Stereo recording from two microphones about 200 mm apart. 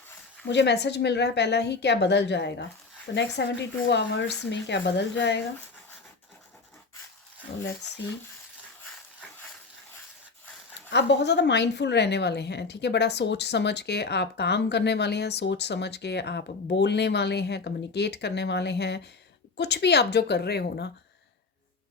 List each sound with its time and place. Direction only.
0.4 s a woman's voice: 60° left (ahead or behind)
10.9 s a woman's voice: 60° left (ahead or behind)